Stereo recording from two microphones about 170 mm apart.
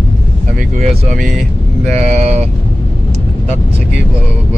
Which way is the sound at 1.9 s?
40° right (ahead or behind).